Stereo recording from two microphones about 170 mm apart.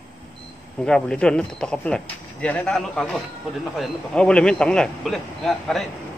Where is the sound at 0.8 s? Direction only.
5° left (ahead or behind).